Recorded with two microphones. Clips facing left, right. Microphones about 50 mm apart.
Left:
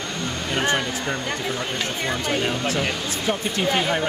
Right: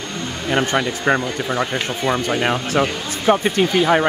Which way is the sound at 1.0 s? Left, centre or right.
Right.